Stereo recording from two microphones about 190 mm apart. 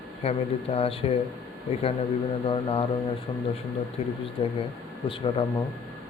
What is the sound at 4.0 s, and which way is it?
Speech, 30° left (ahead or behind).